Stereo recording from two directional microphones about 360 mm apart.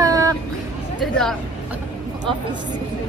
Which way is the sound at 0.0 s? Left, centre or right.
Centre.